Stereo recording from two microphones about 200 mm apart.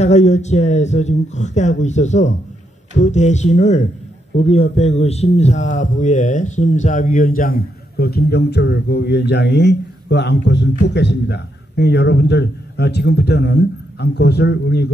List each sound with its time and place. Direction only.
0.0 s a man's voice: 35° left (ahead or behind); by 14.9 s 55° left (ahead or behind)